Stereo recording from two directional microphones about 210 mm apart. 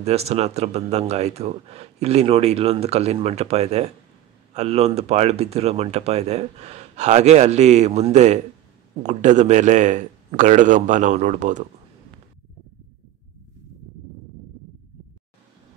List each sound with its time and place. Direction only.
0.0 s speech: 30° right (ahead or behind)